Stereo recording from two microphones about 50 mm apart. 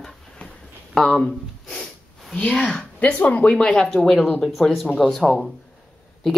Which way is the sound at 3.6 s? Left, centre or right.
Centre.